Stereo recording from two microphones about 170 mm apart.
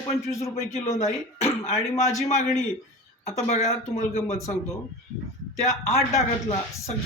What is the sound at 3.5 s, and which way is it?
Speech, 40° left (ahead or behind).